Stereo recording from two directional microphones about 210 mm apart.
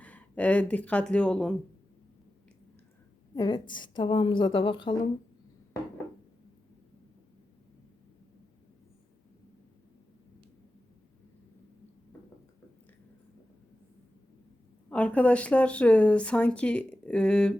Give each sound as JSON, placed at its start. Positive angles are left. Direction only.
{"t": 0.0, "sound": "speech", "side_deg": 5}
{"t": 3.3, "sound": "a woman's voice", "side_deg": 20}
{"t": 14.8, "sound": "speech", "side_deg": 5}